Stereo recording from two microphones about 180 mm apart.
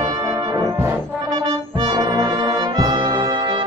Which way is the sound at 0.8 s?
20° right (ahead or behind).